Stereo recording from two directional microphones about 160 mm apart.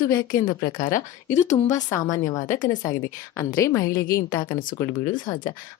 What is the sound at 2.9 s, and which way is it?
A woman's voice, 20° left (ahead or behind).